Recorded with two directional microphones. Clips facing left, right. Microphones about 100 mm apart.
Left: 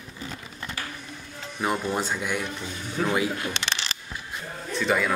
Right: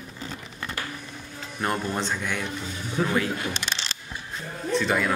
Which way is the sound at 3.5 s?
70° left (ahead or behind).